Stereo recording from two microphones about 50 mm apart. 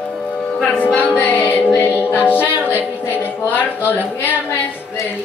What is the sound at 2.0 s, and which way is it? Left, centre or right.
A capella, left.